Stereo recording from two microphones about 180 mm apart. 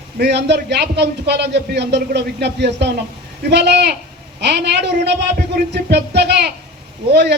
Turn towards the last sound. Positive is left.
turn(degrees=-65)  # may be behind; listen again after turning